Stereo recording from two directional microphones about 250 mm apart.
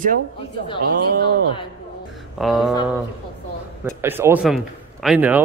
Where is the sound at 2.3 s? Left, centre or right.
Centre.